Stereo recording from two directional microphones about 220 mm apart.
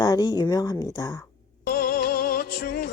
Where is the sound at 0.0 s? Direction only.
15° left (ahead or behind).